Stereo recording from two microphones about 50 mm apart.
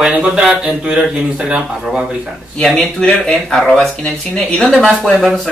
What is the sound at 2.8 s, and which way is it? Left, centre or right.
Speech, left.